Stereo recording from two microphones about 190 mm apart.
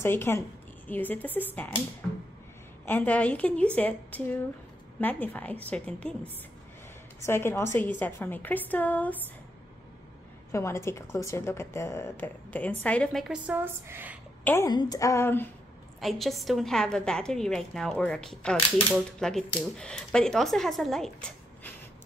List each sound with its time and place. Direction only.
0.0 s a woman's voice: 10° left (ahead or behind)
2.0 s a sound: centre (ahead or behind)
2.8 s a woman's voice: 10° left (ahead or behind)
10.5 s a woman's voice: 15° left (ahead or behind); by 14.1 s 10° right (ahead or behind)
14.4 s a woman's voice: 15° left (ahead or behind)
16.0 s a woman's voice: centre (ahead or behind)